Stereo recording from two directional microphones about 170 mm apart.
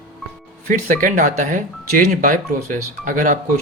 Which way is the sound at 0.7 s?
50° right (ahead or behind).